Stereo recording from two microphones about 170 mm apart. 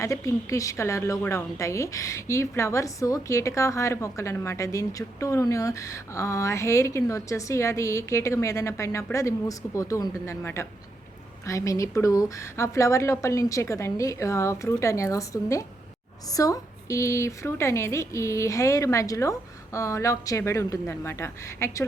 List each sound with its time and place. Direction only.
0.0 s a woman's voice: 20° left (ahead or behind)